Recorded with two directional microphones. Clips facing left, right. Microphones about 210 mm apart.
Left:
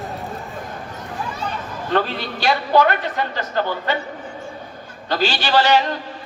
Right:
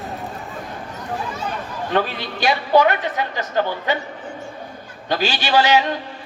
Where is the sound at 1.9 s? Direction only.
15° right (ahead or behind).